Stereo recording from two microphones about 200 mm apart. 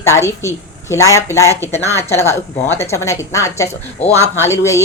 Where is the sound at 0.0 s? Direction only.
15° left (ahead or behind).